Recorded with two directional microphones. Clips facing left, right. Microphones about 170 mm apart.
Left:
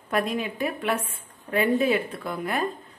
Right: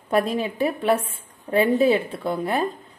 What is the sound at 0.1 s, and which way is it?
A woman's voice, 30° right (ahead or behind).